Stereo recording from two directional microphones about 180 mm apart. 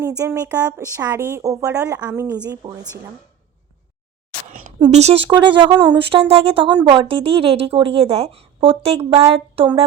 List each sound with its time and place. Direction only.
0.3 s speech: 15° right (ahead or behind)
4.9 s speech: 35° right (ahead or behind)
5.3 s speech: 25° right (ahead or behind)